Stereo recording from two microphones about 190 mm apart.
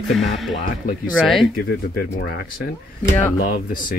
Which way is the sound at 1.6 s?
55° left (ahead or behind).